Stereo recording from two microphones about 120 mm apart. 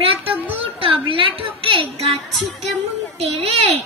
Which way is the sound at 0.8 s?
50° right (ahead or behind).